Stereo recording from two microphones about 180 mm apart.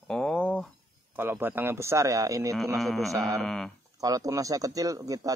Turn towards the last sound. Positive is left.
turn(degrees=-20)  # may be behind; listen again after turning